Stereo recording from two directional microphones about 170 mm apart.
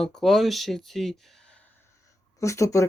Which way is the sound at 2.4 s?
15° left (ahead or behind).